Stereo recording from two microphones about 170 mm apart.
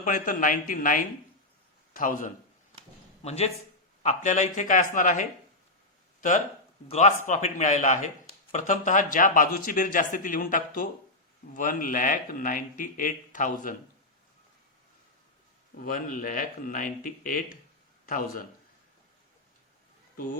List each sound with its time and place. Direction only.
0.0 s a man's voice: 50° left (ahead or behind)
3.2 s speech: 40° left (ahead or behind)
7.3 s speech: 45° left (ahead or behind)
15.8 s a man's voice: 55° left (ahead or behind)